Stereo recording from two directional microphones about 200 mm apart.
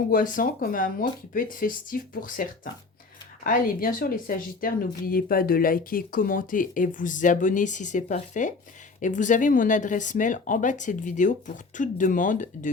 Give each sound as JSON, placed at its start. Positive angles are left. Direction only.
{"t": 0.3, "sound": "speech", "side_deg": 45}